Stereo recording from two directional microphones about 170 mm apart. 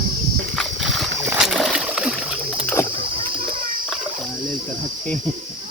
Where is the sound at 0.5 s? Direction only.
Centre (ahead or behind).